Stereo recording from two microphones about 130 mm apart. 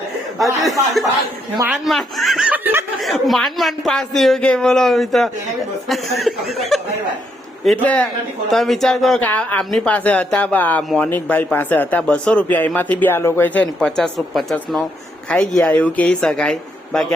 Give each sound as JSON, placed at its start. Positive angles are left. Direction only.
{"t": 0.3, "sound": "a man's voice", "side_deg": 0}
{"t": 3.0, "sound": "a man's voice", "side_deg": 0}
{"t": 9.2, "sound": "speech", "side_deg": 10}